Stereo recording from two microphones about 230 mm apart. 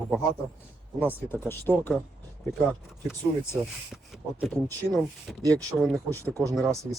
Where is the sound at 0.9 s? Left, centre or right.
Centre.